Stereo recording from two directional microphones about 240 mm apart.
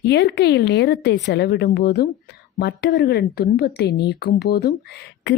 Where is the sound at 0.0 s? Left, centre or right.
Left.